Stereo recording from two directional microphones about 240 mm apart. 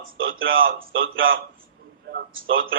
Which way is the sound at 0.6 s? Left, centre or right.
Right.